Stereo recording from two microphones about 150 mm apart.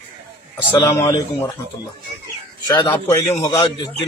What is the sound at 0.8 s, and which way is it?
Speech, 20° left (ahead or behind).